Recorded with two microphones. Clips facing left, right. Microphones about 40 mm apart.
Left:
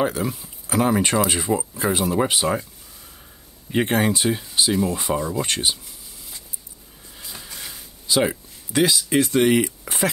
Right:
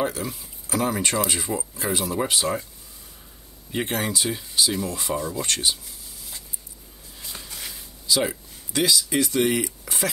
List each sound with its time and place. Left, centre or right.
0.0 s speech: centre
3.7 s speech: left
4.3 s speech: left
7.4 s a sound: centre
8.1 s speech: left